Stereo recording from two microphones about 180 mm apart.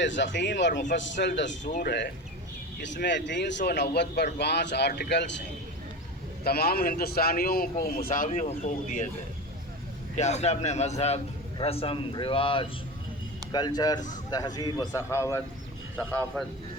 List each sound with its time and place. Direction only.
0.0 s speech: 90° left
0.9 s a man's voice: 90° left
1.6 s a man's voice: 45° left (ahead or behind)
1.9 s speech: 65° left (ahead or behind)
2.8 s speech: 80° left
3.6 s speech: 60° left (ahead or behind)
6.4 s a man's voice: 60° left (ahead or behind); by 9.0 s 45° left (ahead or behind)
10.2 s a man's voice: 40° left (ahead or behind); by 15.4 s 15° left (ahead or behind)
16.0 s speech: centre (ahead or behind)